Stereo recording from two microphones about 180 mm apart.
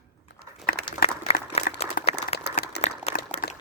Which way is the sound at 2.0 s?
60° left (ahead or behind).